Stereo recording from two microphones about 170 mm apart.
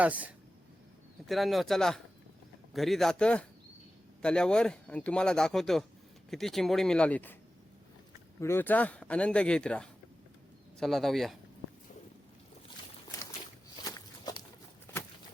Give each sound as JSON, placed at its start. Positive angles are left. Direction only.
{"t": 0.0, "sound": "speech", "side_deg": -10}
{"t": 8.4, "sound": "speech", "side_deg": 15}
{"t": 13.8, "sound": "walk", "side_deg": 20}
{"t": 14.9, "sound": "a sound", "side_deg": 15}